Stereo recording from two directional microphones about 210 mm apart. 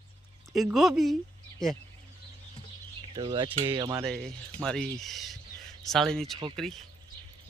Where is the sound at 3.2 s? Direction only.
20° right (ahead or behind).